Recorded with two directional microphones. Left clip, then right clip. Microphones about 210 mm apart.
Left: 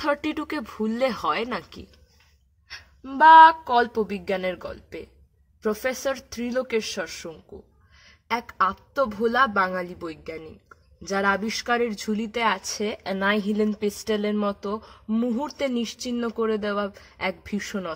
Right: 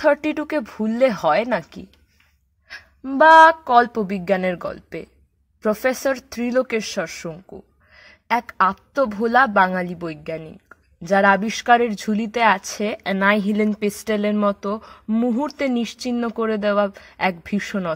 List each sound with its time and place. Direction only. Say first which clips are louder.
0.0 s a woman's voice: right 7 dB; 25° right (ahead or behind)